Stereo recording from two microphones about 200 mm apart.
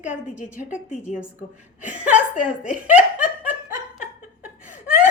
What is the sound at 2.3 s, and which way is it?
Speech, 40° left (ahead or behind).